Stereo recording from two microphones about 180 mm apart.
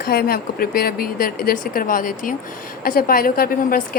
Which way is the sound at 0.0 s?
55° left (ahead or behind).